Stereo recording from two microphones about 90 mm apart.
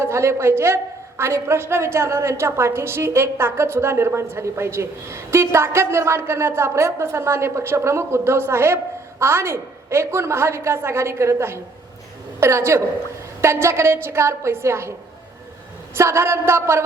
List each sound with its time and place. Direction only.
0.0 s a woman's voice: 30° right (ahead or behind)
16.0 s a woman's voice: 30° right (ahead or behind)